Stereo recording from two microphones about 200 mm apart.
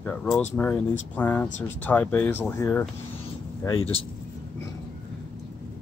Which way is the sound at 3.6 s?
25° left (ahead or behind).